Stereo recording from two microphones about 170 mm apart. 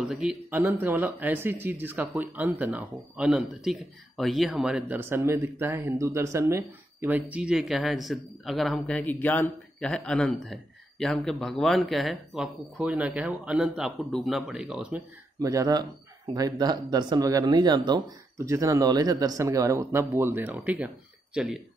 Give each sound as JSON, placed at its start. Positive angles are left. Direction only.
{"t": 0.0, "sound": "speech", "side_deg": -5}
{"t": 15.3, "sound": "speech", "side_deg": -20}